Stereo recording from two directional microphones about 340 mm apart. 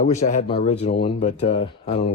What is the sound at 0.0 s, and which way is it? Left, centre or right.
Speech, centre.